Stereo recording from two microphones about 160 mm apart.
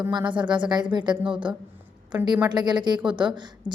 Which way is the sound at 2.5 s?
25° right (ahead or behind).